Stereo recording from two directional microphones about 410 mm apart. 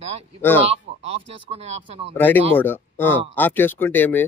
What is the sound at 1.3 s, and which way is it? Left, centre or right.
Speech, centre.